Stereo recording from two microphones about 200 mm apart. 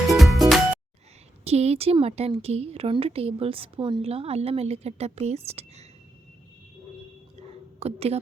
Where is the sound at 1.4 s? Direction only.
30° right (ahead or behind).